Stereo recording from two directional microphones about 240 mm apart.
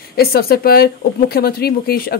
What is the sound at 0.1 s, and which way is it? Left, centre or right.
A woman's voice, left.